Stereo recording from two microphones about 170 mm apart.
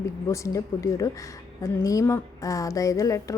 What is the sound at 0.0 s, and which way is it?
A woman's voice, 20° left (ahead or behind).